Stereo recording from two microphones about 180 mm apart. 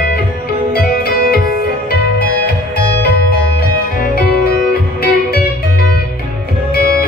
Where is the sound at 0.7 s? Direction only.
60° left (ahead or behind).